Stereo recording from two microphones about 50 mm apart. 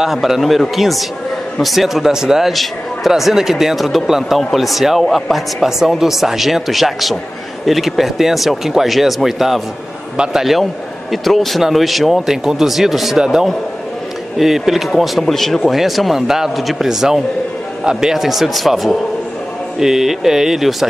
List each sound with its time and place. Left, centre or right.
0.0 s a man's voice: centre
10.1 s speech: centre
10.4 s a man's voice: centre